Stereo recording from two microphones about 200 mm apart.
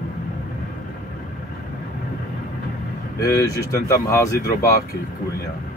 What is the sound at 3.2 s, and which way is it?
Speech, 15° left (ahead or behind).